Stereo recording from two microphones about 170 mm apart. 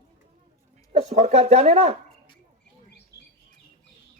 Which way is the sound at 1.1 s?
40° right (ahead or behind).